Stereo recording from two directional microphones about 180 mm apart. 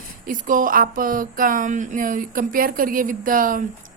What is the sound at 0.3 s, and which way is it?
A woman's voice, 50° right (ahead or behind).